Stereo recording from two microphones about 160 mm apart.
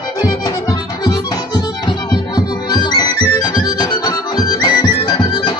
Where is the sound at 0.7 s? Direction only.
25° left (ahead or behind).